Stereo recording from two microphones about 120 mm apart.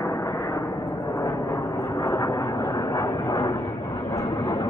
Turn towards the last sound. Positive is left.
turn(degrees=45)  # may be behind; listen again after turning